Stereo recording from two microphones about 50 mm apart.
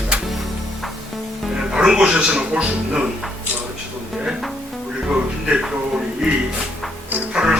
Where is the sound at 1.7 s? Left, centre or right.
Centre.